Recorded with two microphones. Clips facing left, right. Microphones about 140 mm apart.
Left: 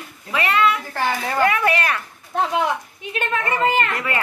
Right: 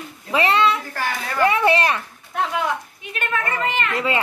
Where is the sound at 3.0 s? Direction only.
30° left (ahead or behind).